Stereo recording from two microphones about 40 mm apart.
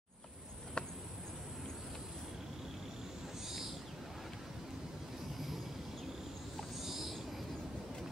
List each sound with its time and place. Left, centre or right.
0.8 s insect: left
6.8 s owl: centre